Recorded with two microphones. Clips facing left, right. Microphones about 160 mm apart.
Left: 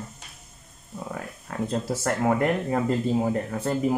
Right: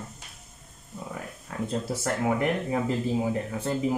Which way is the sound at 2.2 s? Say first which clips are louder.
Left 3 dB; 55° left (ahead or behind).